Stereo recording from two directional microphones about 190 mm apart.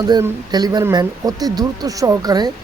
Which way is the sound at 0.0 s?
20° right (ahead or behind).